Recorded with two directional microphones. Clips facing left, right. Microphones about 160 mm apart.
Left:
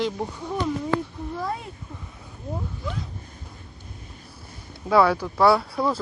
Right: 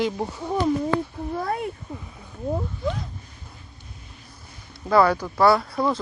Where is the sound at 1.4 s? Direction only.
60° right (ahead or behind).